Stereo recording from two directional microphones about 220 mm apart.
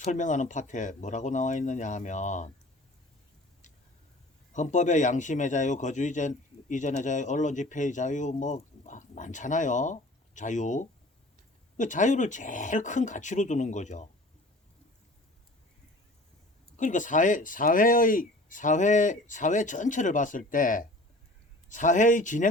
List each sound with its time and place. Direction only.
0.0 s a man's voice: 35° left (ahead or behind)
4.5 s a man's voice: 35° left (ahead or behind)
16.7 s a man's voice: 35° left (ahead or behind)